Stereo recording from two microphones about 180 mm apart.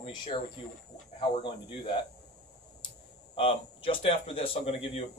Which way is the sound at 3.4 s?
30° left (ahead or behind).